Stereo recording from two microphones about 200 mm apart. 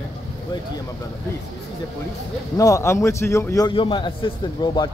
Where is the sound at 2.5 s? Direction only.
15° left (ahead or behind).